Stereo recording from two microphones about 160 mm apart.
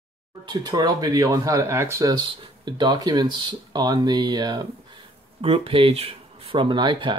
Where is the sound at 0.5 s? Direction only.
25° right (ahead or behind).